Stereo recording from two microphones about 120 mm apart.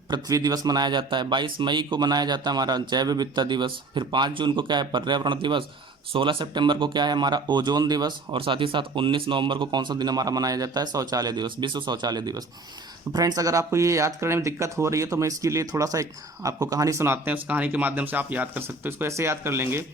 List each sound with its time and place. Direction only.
0.1 s speech: 30° right (ahead or behind)